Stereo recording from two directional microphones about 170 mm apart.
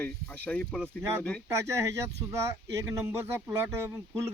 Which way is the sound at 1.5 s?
15° right (ahead or behind).